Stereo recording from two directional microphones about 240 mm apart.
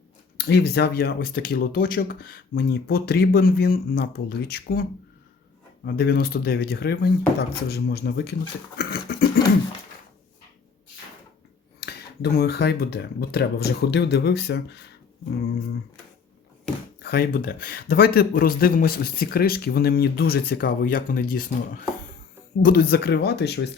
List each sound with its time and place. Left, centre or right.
0.3 s a man's voice: left
8.8 s dog: left
11.8 s speech: left
17.0 s a man's voice: left